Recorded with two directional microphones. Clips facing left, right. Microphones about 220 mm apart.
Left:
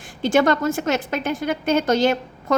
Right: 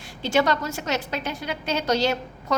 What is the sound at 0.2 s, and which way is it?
A woman's voice, 50° left (ahead or behind).